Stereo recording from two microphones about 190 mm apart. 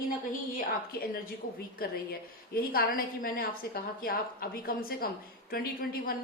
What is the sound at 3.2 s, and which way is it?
A woman's voice, 50° left (ahead or behind).